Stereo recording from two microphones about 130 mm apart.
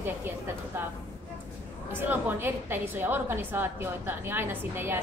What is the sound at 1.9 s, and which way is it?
A woman's voice, 15° right (ahead or behind).